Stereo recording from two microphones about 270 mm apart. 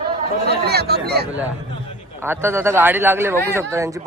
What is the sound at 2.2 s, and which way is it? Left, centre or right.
Speech, centre.